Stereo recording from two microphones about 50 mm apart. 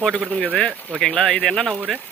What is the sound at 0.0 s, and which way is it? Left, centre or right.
Speech, left.